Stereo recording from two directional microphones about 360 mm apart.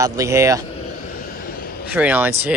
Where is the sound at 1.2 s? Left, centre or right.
Left.